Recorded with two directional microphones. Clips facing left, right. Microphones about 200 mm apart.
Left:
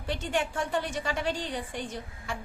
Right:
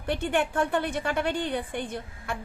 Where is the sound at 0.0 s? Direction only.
60° right (ahead or behind).